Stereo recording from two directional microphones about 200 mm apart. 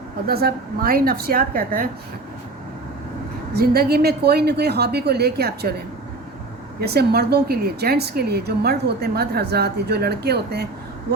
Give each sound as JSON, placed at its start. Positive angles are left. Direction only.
{"t": 0.3, "sound": "a woman's voice", "side_deg": -50}
{"t": 3.6, "sound": "a woman's voice", "side_deg": -50}